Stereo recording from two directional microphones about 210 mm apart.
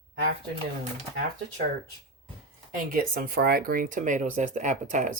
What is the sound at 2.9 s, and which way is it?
Speech, 45° right (ahead or behind).